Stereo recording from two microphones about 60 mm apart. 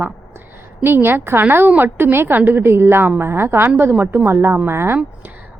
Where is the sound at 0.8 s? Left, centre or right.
Right.